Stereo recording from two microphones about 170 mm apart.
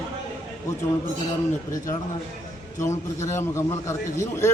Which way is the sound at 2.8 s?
15° left (ahead or behind).